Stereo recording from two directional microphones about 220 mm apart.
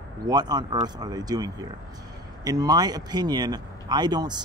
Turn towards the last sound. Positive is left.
turn(degrees=-20)  # may be behind; listen again after turning